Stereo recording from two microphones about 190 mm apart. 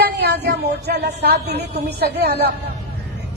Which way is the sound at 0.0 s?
60° right (ahead or behind).